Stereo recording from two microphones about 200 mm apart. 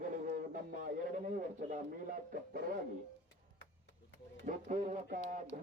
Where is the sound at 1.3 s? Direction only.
40° right (ahead or behind).